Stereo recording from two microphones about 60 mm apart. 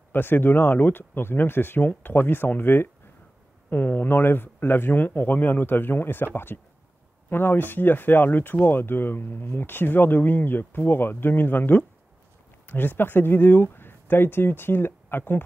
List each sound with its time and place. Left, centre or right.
0.1 s speech: left